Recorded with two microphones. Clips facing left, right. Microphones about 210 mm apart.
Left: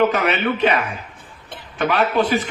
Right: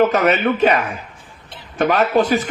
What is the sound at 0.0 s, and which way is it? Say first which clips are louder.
Speech: right 3 dB; 40° right (ahead or behind).